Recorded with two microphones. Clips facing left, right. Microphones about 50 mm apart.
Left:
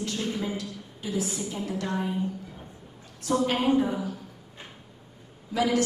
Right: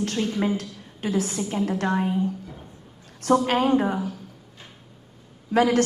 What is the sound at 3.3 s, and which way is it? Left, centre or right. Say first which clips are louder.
Speech: right 4 dB; right.